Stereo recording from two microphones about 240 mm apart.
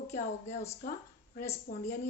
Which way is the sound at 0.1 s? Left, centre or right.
Left.